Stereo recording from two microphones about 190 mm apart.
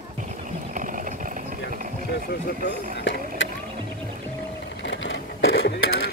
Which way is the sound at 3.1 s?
75° left (ahead or behind).